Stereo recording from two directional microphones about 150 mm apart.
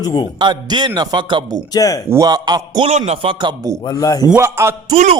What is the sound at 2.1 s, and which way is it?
Speech, 25° right (ahead or behind).